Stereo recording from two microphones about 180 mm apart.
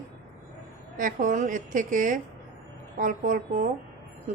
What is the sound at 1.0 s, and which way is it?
Speech, 45° right (ahead or behind).